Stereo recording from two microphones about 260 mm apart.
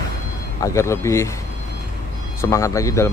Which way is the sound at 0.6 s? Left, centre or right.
Centre.